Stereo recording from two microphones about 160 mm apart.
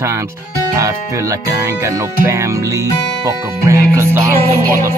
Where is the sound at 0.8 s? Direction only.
20° right (ahead or behind).